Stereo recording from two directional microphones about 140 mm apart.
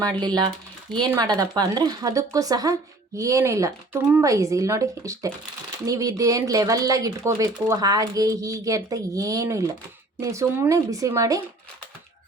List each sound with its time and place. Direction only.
0.2 s speech: 30° right (ahead or behind)